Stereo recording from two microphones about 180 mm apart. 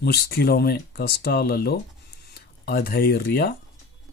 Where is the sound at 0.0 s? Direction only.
60° left (ahead or behind).